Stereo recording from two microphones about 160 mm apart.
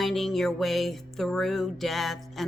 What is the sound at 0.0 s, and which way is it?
Music, centre (ahead or behind).